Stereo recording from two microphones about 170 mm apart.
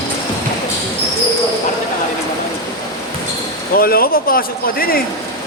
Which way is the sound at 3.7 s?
60° left (ahead or behind).